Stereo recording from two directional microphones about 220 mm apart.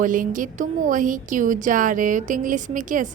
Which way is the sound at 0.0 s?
35° right (ahead or behind).